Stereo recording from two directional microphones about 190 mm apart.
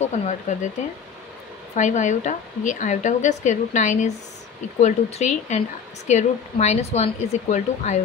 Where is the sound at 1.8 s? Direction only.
40° left (ahead or behind).